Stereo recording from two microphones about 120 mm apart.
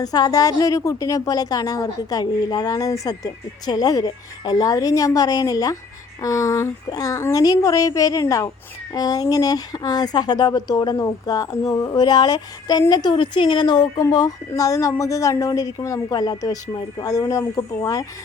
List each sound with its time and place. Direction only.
0.0 s a woman's voice: 30° left (ahead or behind)